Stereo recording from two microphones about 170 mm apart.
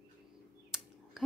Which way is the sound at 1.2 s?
Centre (ahead or behind).